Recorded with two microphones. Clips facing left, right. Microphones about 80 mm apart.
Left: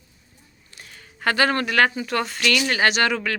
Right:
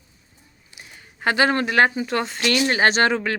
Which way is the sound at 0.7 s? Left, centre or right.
Centre.